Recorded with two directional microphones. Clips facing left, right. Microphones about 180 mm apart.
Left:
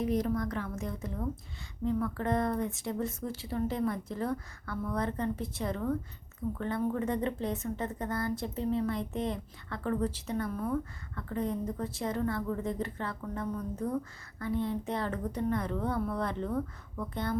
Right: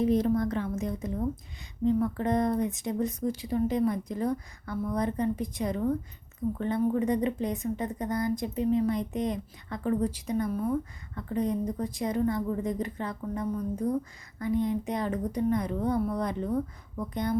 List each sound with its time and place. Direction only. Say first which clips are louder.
0.0 s a woman's voice: right 5 dB; 25° right (ahead or behind)